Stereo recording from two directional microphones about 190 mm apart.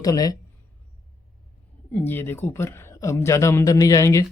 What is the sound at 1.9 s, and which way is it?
A man's voice, 10° left (ahead or behind).